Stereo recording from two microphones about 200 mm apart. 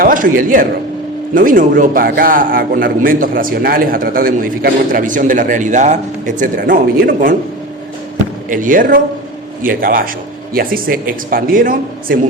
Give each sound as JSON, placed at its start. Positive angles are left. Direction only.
{"t": 0.0, "sound": "a man's voice", "side_deg": -45}
{"t": 8.4, "sound": "a man's voice", "side_deg": -40}